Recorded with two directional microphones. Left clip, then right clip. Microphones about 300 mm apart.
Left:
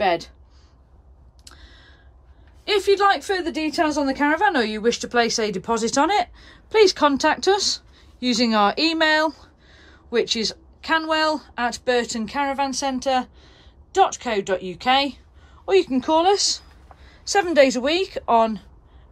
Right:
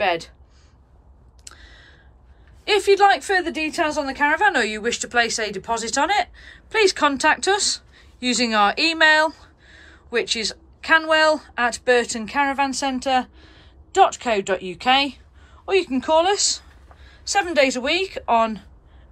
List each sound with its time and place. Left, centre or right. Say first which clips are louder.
0.0 s speech: left 1 dB; centre
1.5 s a sound: right 2 dB; centre
2.6 s a woman's voice: right 2 dB; centre